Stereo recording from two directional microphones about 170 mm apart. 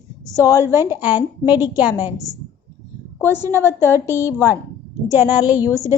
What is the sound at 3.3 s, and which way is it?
Speech, 20° right (ahead or behind).